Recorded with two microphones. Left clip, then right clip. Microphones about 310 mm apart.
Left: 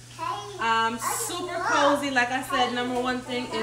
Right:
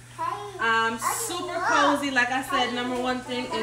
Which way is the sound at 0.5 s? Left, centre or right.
Centre.